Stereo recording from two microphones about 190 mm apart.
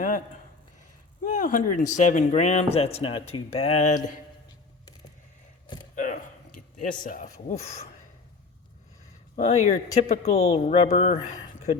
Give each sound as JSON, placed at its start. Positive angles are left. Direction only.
{"t": 1.2, "sound": "speech", "side_deg": 45}
{"t": 6.0, "sound": "a sound", "side_deg": 45}
{"t": 9.3, "sound": "speech", "side_deg": 35}